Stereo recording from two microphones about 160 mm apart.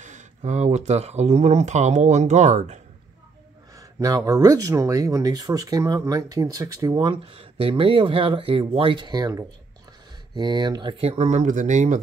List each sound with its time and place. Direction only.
0.0 s speech: 45° right (ahead or behind)
4.0 s speech: 20° right (ahead or behind); by 12.0 s 50° right (ahead or behind)